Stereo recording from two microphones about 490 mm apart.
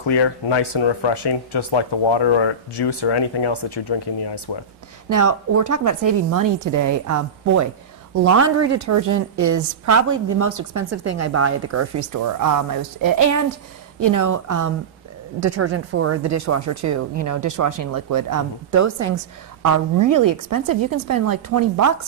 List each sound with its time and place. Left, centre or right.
0.0 s speech: left
5.1 s speech: right
15.4 s speech: right